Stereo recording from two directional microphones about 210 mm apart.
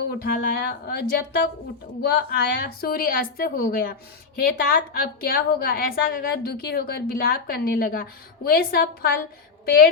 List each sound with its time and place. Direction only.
0.0 s a woman's voice: 45° left (ahead or behind)